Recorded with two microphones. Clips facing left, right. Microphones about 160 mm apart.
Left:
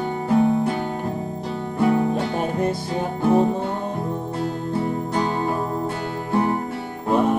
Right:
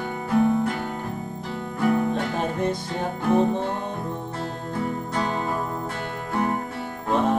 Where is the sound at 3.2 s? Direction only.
30° left (ahead or behind).